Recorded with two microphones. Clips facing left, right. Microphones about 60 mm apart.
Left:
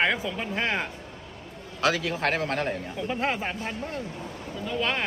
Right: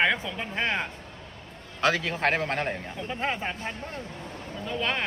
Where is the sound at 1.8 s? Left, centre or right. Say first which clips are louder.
Even; right.